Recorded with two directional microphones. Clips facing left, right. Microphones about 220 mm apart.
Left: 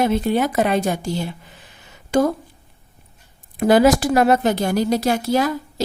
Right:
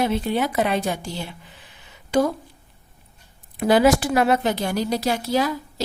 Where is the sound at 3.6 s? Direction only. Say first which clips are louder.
Left 3 dB; 45° left (ahead or behind).